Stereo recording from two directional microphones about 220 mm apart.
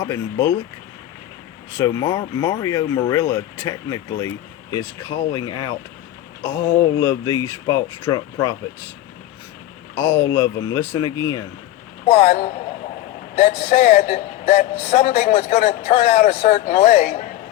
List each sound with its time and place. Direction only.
0.0 s speech: 15° left (ahead or behind)
1.7 s speech: 15° left (ahead or behind)
7.0 s speech: 15° left (ahead or behind)
10.0 s speech: 10° left (ahead or behind)
12.0 s a man's voice: 35° left (ahead or behind)